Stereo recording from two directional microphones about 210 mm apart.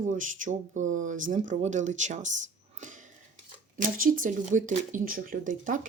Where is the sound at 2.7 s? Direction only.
35° right (ahead or behind).